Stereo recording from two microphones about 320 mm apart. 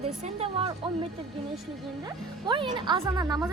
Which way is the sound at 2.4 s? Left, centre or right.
Centre.